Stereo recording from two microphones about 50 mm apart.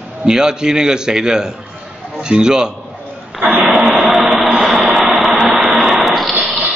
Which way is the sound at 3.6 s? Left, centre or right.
Centre.